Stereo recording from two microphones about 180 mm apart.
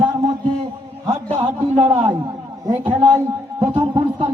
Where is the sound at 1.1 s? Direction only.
40° right (ahead or behind).